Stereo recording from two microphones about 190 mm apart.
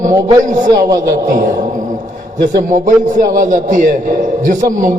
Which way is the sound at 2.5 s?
45° right (ahead or behind).